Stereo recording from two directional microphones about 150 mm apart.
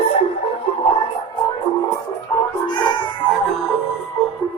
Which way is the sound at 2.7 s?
30° left (ahead or behind).